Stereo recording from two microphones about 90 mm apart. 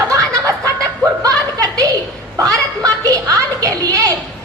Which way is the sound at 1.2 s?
45° right (ahead or behind).